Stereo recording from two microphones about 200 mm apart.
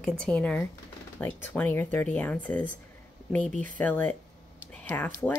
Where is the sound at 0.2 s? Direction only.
5° left (ahead or behind).